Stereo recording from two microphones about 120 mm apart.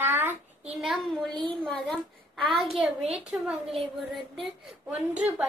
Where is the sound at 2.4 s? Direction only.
Centre (ahead or behind).